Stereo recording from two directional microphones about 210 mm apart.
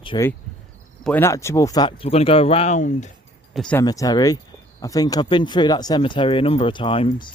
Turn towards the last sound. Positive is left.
turn(degrees=25)  # may be behind; listen again after turning